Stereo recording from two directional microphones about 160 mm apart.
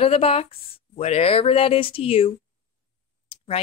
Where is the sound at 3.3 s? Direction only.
35° left (ahead or behind).